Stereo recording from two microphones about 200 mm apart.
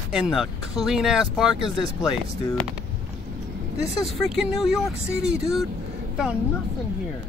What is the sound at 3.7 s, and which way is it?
Speech, centre (ahead or behind).